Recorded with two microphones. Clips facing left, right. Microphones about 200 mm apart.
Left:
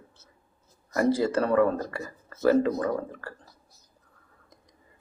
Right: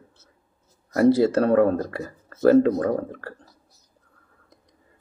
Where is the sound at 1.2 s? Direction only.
45° right (ahead or behind).